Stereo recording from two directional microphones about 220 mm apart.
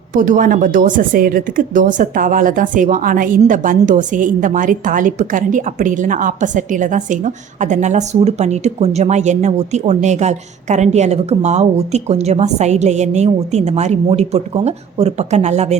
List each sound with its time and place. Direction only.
0.1 s a woman's voice: 35° right (ahead or behind)